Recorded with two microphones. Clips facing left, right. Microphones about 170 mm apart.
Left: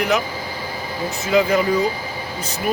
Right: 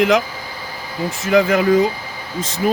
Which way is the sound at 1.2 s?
85° right.